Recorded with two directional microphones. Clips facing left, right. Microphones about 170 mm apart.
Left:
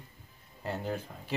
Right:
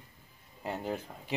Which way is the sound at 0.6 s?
15° right (ahead or behind).